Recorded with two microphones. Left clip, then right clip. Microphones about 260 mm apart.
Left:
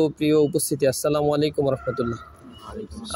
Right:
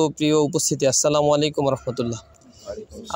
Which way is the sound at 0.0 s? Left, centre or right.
Right.